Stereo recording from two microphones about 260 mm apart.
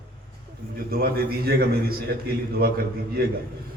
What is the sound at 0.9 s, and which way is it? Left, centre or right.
Music, right.